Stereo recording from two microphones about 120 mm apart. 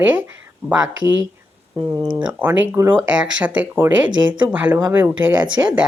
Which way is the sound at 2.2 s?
15° right (ahead or behind).